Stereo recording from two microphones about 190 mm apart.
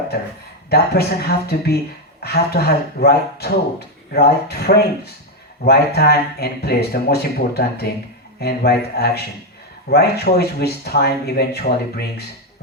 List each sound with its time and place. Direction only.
0.7 s speech: 55° left (ahead or behind)